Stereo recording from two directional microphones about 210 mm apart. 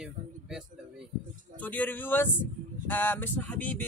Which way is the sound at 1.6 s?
10° left (ahead or behind).